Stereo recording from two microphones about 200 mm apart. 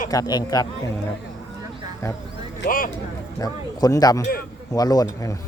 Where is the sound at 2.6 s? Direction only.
45° left (ahead or behind).